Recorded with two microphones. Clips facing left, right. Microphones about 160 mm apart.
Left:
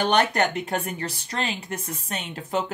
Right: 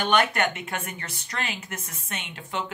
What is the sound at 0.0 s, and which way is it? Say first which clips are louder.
Speech: left 2 dB; 35° left (ahead or behind).